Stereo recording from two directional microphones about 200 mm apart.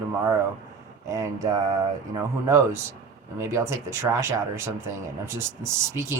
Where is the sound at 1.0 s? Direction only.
15° right (ahead or behind).